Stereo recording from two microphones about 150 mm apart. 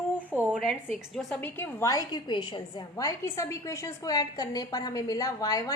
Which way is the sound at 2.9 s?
20° left (ahead or behind).